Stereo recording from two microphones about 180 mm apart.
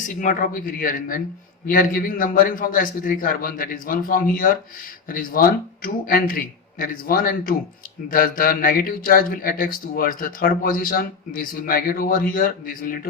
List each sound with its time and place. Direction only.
0.0 s speech: 45° left (ahead or behind)